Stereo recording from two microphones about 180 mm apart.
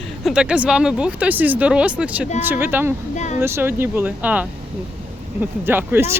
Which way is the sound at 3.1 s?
40° left (ahead or behind).